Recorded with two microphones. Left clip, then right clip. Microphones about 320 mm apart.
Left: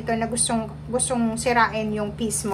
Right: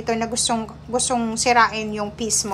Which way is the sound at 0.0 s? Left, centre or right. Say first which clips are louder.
Right 2 dB; centre.